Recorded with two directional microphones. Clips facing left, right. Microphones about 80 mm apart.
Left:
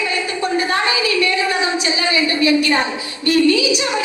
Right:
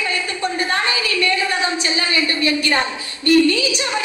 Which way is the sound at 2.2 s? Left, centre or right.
Right.